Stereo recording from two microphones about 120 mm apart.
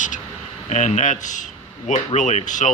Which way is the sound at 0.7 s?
70° left (ahead or behind).